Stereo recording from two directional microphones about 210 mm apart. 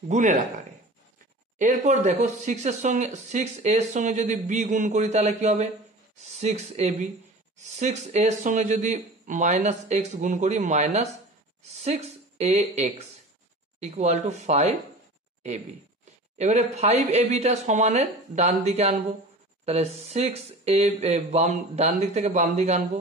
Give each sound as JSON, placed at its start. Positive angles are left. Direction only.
{"t": 0.1, "sound": "speech", "side_deg": -35}
{"t": 1.6, "sound": "a woman's voice", "side_deg": -35}